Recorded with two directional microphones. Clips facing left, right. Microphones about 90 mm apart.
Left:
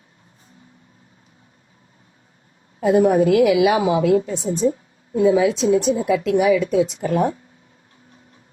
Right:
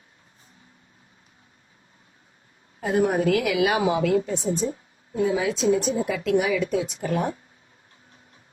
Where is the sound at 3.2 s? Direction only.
30° left (ahead or behind).